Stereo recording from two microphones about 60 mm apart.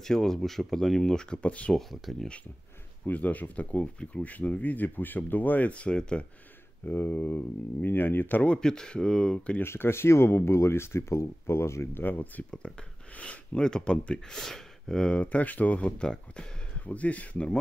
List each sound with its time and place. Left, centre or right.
0.0 s speech: centre
1.7 s speech: centre
3.1 s speech: left
6.8 s speech: left
8.5 s speech: centre
9.6 s speech: left
12.0 s speech: left
12.4 s speech: centre
16.0 s speech: centre
16.8 s speech: left